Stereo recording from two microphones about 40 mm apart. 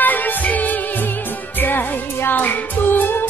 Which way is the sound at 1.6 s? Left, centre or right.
Left.